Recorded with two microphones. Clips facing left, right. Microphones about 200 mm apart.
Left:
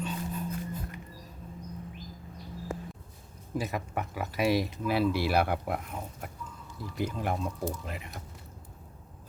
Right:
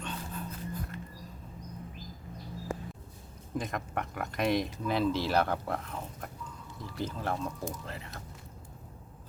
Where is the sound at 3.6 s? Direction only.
5° left (ahead or behind).